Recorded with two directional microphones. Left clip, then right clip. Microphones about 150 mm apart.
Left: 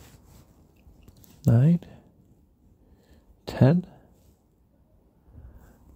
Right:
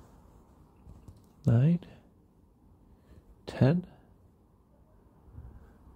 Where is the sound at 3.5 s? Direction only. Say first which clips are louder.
Left 5 dB; 30° left (ahead or behind).